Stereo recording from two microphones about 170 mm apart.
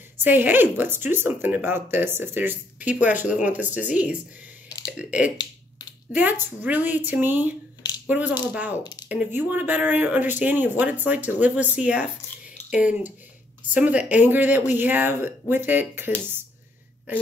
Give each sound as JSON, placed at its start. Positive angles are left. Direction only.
{"t": 0.2, "sound": "a woman's voice", "side_deg": -10}
{"t": 5.4, "sound": "finger snapping", "side_deg": 25}
{"t": 6.4, "sound": "a woman's voice", "side_deg": -10}
{"t": 8.7, "sound": "speech", "side_deg": 25}
{"t": 9.1, "sound": "a woman's voice", "side_deg": -10}